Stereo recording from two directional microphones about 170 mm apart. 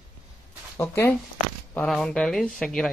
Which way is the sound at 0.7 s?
15° left (ahead or behind).